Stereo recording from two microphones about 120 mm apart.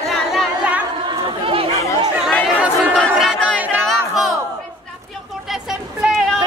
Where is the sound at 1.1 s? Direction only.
50° right (ahead or behind).